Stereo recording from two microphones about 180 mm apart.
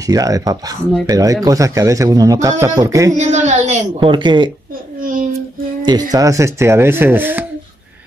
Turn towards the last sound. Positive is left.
turn(degrees=-10)  # may be behind; listen again after turning